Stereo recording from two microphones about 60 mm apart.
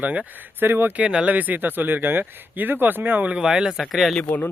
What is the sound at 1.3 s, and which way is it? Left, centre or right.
Speech, right.